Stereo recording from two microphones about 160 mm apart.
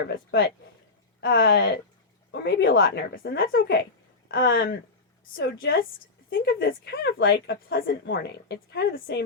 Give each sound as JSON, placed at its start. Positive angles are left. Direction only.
{"t": 0.0, "sound": "a woman's voice", "side_deg": 80}
{"t": 2.3, "sound": "a woman's voice", "side_deg": 90}